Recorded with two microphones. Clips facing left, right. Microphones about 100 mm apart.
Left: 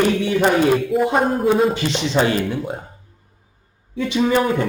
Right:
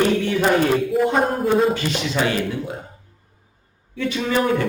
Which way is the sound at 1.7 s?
25° left (ahead or behind).